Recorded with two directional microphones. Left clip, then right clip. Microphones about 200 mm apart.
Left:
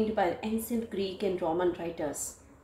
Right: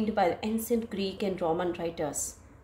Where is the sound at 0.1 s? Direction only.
50° right (ahead or behind).